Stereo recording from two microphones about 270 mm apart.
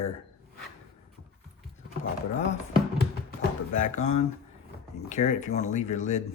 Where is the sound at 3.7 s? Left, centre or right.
Left.